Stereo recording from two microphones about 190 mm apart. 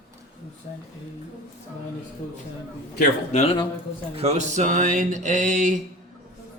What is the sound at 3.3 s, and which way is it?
Speech, 30° left (ahead or behind).